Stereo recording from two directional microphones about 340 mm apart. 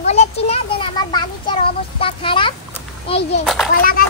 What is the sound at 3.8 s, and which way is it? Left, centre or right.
Speech, left.